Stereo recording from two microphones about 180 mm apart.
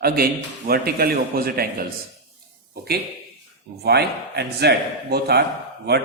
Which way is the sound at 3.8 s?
65° right (ahead or behind).